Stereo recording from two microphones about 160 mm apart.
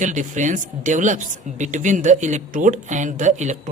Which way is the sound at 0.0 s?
50° right (ahead or behind).